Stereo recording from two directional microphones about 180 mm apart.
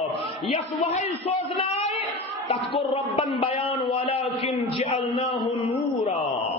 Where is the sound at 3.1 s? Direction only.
30° left (ahead or behind).